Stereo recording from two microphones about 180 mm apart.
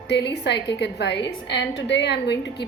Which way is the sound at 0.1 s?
70° left (ahead or behind).